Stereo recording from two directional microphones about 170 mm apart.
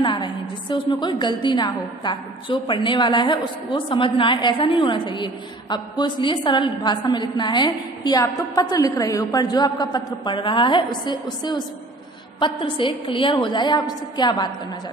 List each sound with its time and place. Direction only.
0.0 s a woman's voice: 30° left (ahead or behind)
12.4 s a woman's voice: 30° left (ahead or behind)